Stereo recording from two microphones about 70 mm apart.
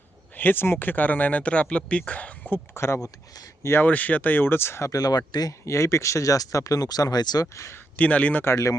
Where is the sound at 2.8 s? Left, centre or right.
Left.